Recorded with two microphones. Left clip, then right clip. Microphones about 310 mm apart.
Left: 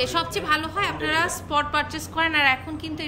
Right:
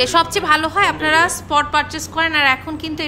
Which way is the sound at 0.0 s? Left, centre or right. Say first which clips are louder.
Right 9 dB; centre.